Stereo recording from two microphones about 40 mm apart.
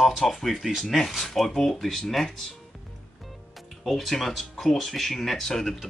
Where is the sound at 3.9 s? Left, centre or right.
Centre.